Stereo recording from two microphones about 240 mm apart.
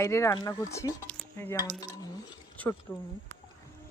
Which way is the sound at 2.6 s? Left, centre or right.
Centre.